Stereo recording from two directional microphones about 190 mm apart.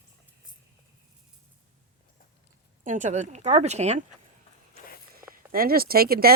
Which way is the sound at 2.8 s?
40° right (ahead or behind).